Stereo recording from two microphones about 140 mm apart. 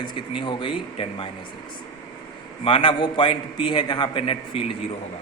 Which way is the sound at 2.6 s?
40° left (ahead or behind).